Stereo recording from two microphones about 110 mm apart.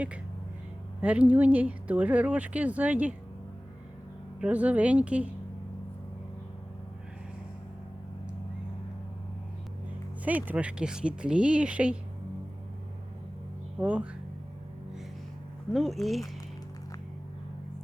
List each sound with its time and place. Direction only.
1.0 s speech: 10° right (ahead or behind)
4.4 s speech: 10° right (ahead or behind)
10.2 s speech: 15° right (ahead or behind)
13.7 s speech: 15° right (ahead or behind)
15.7 s speech: centre (ahead or behind)